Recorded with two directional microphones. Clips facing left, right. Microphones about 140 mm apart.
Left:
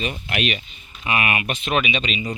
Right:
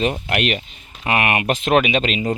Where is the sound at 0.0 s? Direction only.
70° right (ahead or behind); by 2.2 s 90° right.